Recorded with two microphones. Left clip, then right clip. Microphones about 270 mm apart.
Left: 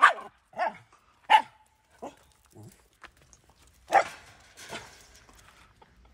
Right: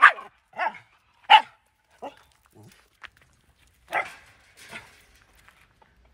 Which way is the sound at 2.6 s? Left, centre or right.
Centre.